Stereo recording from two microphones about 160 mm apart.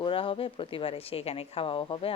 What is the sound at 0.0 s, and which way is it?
A woman's voice, 35° left (ahead or behind).